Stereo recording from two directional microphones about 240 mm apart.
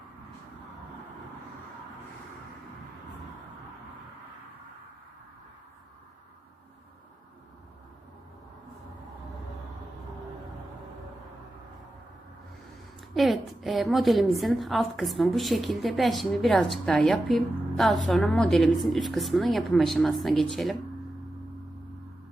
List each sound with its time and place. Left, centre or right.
13.0 s a woman's voice: centre